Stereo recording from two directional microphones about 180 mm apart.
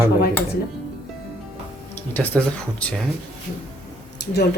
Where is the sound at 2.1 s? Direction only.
10° left (ahead or behind).